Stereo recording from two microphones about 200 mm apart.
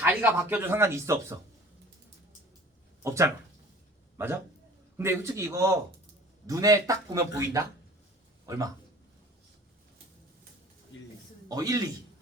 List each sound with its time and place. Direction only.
0.0 s speech: 10° right (ahead or behind)
3.0 s speech: 15° right (ahead or behind)
11.4 s a man's voice: 20° right (ahead or behind)